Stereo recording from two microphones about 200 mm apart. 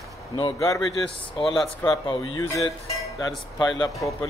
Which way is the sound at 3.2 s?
20° left (ahead or behind).